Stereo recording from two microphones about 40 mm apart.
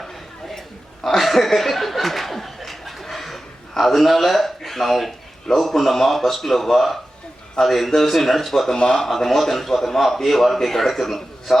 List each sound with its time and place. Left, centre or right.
1.0 s chuckle: centre
5.5 s a man's voice: centre
8.8 s speech: left
9.0 s a man's voice: centre